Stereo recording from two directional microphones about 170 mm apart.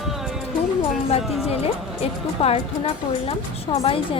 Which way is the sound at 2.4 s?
35° left (ahead or behind).